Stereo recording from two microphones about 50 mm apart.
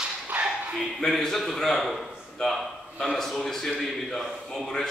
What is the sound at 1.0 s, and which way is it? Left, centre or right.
A man's voice, centre.